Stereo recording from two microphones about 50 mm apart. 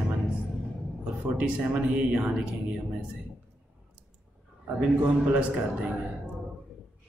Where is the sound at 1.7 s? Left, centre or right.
Right.